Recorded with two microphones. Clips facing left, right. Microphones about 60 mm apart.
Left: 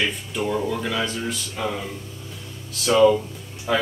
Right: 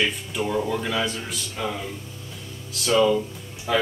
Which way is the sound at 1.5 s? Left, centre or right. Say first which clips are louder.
Even; centre.